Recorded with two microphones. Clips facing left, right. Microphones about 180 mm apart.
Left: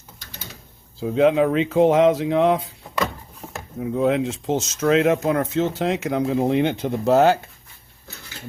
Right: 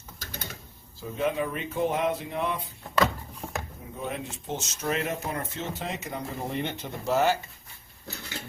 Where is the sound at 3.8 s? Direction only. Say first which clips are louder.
Left 19 dB; 90° left; by 7.3 s 65° left (ahead or behind).